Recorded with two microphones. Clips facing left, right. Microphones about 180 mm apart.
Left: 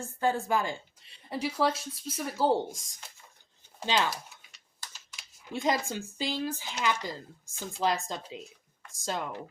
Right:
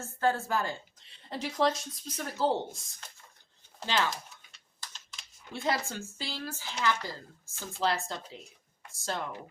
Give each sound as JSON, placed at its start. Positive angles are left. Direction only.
{"t": 0.0, "sound": "speech", "side_deg": 15}